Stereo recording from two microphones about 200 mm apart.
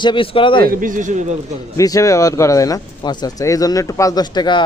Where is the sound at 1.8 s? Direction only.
15° left (ahead or behind).